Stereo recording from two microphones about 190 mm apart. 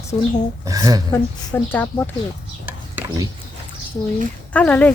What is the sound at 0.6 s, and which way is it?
Speech, 20° right (ahead or behind).